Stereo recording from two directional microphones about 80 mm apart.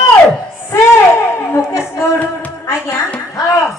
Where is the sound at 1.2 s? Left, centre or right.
Left.